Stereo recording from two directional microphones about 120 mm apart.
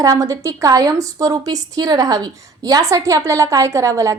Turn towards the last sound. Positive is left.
turn(degrees=-25)  # may be behind; listen again after turning